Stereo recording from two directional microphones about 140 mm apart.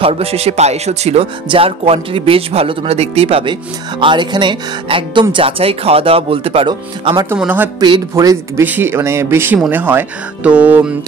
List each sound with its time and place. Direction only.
0.0 s speech: 45° right (ahead or behind)
4.0 s speech: 35° right (ahead or behind)
6.7 s speech: 30° right (ahead or behind)
7.3 s speech: 10° right (ahead or behind)
8.1 s speech: 20° right (ahead or behind)